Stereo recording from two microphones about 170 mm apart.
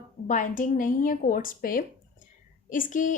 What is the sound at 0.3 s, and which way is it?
A woman's voice, 50° left (ahead or behind).